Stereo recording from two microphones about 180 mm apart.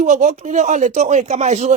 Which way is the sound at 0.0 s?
40° right (ahead or behind).